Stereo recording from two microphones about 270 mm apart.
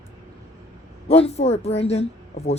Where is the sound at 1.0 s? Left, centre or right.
Left.